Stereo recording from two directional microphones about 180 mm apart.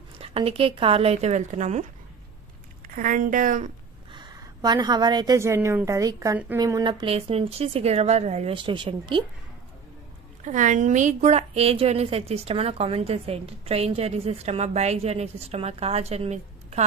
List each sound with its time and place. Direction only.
0.2 s a woman's voice: 35° right (ahead or behind)
3.0 s speech: 45° right (ahead or behind)
4.1 s a woman's voice: 25° right (ahead or behind)
10.4 s a woman's voice: 45° right (ahead or behind)